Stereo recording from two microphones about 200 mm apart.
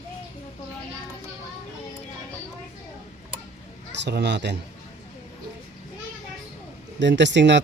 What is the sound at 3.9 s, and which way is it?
Speech, 60° right (ahead or behind).